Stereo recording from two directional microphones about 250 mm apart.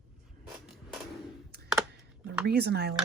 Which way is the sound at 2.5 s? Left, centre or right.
Right.